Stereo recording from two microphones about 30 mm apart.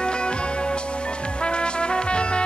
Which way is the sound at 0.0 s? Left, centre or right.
Left.